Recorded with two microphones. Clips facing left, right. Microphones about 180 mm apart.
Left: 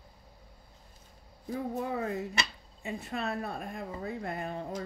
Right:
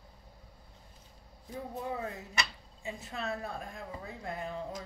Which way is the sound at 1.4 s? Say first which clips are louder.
Left 5 dB; 85° left.